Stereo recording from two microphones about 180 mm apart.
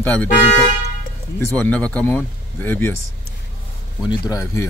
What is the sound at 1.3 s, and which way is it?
Speech, 10° left (ahead or behind).